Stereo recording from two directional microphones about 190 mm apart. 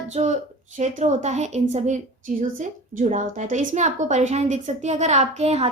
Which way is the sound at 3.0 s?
40° right (ahead or behind).